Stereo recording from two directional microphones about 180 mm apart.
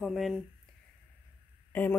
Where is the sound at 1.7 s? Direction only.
10° left (ahead or behind).